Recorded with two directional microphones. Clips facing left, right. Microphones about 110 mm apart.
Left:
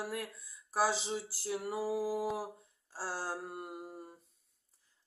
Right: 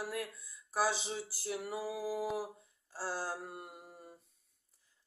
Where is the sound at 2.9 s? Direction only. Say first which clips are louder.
Even; 35° left (ahead or behind).